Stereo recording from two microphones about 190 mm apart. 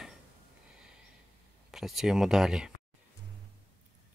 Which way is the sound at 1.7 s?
Centre (ahead or behind).